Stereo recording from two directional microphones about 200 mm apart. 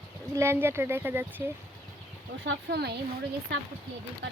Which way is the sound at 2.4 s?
60° right (ahead or behind).